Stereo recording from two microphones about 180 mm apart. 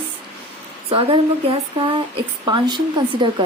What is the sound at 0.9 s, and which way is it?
Speech, 30° right (ahead or behind).